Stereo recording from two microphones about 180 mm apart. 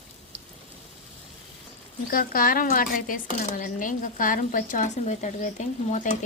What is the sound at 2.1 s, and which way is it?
Speech, 50° left (ahead or behind).